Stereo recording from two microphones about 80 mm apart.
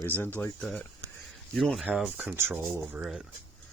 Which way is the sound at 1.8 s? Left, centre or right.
Centre.